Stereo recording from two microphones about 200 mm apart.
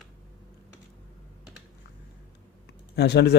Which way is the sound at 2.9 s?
55° left (ahead or behind).